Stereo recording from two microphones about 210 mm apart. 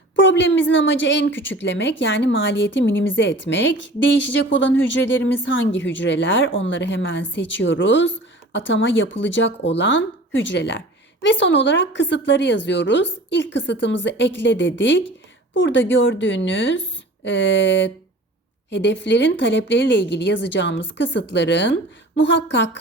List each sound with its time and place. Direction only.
0.2 s speech: 60° left (ahead or behind)
5.7 s speech: 60° left (ahead or behind)